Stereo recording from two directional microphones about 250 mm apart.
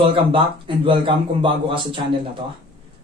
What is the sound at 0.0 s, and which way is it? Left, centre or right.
Speech, right.